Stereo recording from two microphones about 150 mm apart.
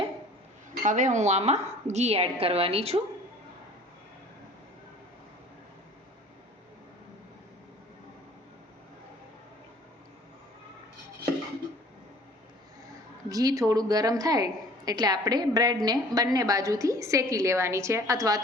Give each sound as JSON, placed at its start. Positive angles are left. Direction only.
{"t": 0.7, "sound": "a woman's voice", "side_deg": -55}
{"t": 13.2, "sound": "a woman's voice", "side_deg": -25}